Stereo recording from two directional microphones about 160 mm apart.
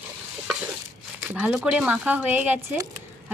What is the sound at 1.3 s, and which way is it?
Speech, 5° right (ahead or behind).